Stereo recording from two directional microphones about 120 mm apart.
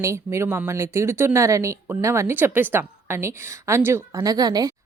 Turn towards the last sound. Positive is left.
turn(degrees=-35)  # may be behind; listen again after turning